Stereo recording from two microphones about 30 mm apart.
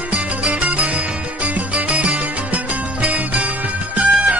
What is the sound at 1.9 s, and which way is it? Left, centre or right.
Music, right.